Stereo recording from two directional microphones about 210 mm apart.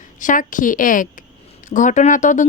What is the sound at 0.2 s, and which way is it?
Speech, 40° left (ahead or behind).